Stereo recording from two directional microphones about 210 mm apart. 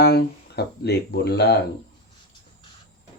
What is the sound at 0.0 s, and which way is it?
Speech, 50° left (ahead or behind).